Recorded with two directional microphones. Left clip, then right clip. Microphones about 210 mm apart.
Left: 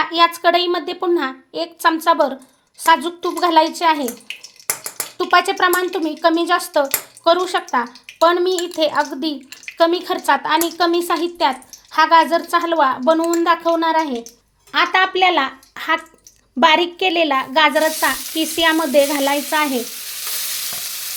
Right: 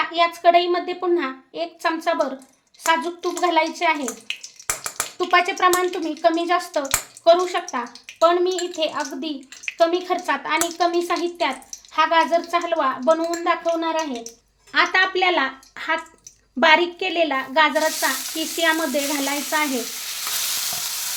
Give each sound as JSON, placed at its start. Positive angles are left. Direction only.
{"t": 0.0, "sound": "a woman's voice", "side_deg": 35}
{"t": 5.1, "sound": "a woman's voice", "side_deg": 35}
{"t": 14.7, "sound": "speech", "side_deg": 25}